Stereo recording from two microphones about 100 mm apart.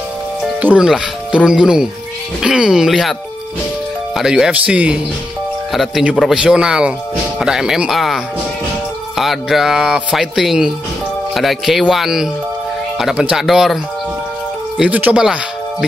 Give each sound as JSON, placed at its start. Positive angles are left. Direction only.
{"t": 0.6, "sound": "speech", "side_deg": -15}
{"t": 0.8, "sound": "speech", "side_deg": -5}
{"t": 14.8, "sound": "speech", "side_deg": -15}